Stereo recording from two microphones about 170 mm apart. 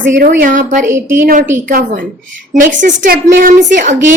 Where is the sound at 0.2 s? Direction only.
60° right (ahead or behind).